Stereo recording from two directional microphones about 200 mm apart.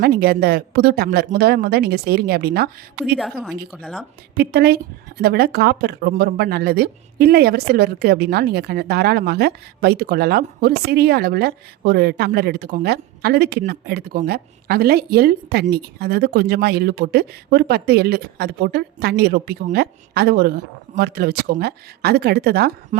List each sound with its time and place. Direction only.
0.0 s speech: 50° right (ahead or behind)
3.2 s a woman's voice: centre (ahead or behind)
4.4 s speech: 55° right (ahead or behind)